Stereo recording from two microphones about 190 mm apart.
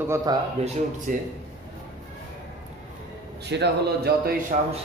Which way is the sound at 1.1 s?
45° right (ahead or behind).